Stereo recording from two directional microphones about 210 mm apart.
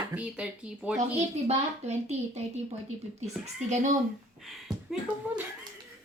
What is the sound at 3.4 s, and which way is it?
Speech, 35° right (ahead or behind).